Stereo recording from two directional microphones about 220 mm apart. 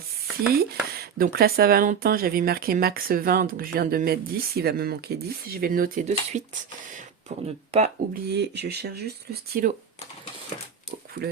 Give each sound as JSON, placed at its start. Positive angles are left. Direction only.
{"t": 0.6, "sound": "speech", "side_deg": -45}
{"t": 8.3, "sound": "speech", "side_deg": -50}